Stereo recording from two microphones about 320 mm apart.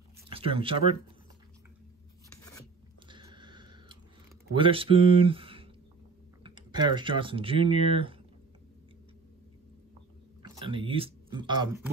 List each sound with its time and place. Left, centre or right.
0.3 s speech: centre
3.1 s chewing: centre
4.6 s speech: centre
10.4 s speech: centre